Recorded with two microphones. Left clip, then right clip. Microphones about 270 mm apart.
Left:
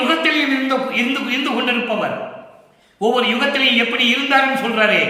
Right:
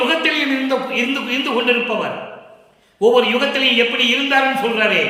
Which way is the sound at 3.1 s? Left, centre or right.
Centre.